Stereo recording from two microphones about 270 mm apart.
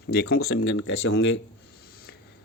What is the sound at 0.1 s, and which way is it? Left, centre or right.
Speech, left.